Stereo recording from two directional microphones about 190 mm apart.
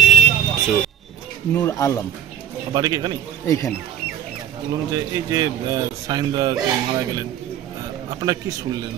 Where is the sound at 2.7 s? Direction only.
20° right (ahead or behind).